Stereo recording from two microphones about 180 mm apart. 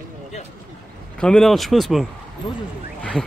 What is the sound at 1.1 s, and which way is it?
Speech, 5° left (ahead or behind).